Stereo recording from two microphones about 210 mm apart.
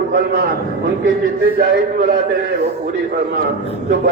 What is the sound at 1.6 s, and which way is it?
Speech, 50° right (ahead or behind).